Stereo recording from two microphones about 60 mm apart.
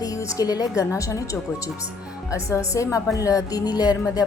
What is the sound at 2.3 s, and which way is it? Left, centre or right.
A woman's voice, left.